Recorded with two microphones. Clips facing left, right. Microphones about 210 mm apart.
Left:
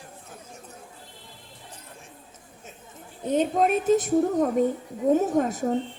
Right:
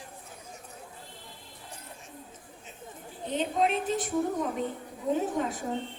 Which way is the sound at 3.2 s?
45° left (ahead or behind).